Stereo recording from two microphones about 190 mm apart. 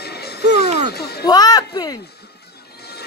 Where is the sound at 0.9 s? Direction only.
55° left (ahead or behind).